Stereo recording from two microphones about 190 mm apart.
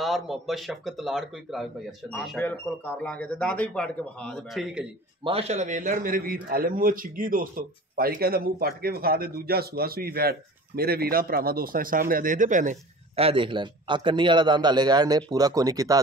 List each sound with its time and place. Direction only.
0.0 s a man's voice: centre (ahead or behind)
5.2 s a man's voice: 30° right (ahead or behind)